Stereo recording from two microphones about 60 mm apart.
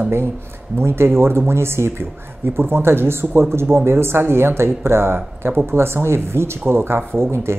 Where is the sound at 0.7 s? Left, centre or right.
Right.